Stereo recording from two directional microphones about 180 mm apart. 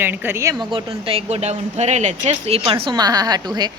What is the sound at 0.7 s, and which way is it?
Speech, 30° right (ahead or behind).